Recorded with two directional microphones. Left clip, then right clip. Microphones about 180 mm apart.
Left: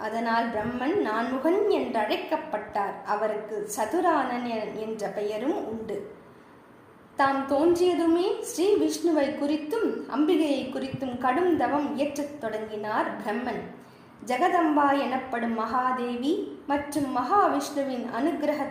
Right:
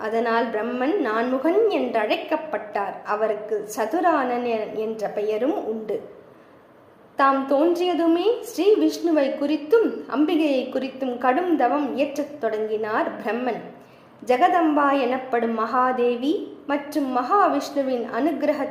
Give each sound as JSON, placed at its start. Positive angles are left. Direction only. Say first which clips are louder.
{"t": 0.0, "sound": "a woman's voice", "louder": "right 5 dB", "side_deg": -15}
{"t": 7.2, "sound": "a woman's voice", "louder": "right 5 dB", "side_deg": -15}